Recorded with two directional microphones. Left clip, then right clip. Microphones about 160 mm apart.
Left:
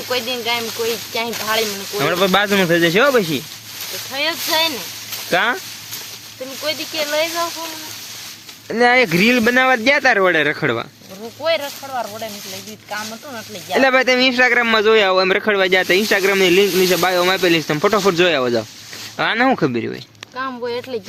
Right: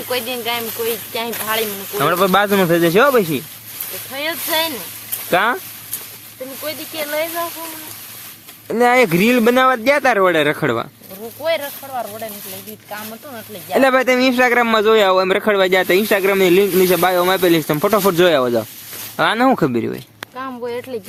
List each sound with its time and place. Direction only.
0.1 s speech: 10° right (ahead or behind)
2.0 s speech: 15° right (ahead or behind)
5.3 s speech: 20° right (ahead or behind)
6.7 s speech: centre (ahead or behind)
8.7 s speech: 25° right (ahead or behind)
11.4 s speech: 5° right (ahead or behind)
13.7 s speech: 25° right (ahead or behind)
20.3 s speech: centre (ahead or behind)